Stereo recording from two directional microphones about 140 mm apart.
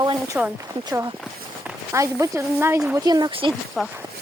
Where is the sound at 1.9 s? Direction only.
20° right (ahead or behind).